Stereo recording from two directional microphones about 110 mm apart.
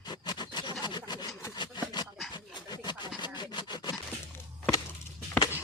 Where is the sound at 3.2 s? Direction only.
45° left (ahead or behind).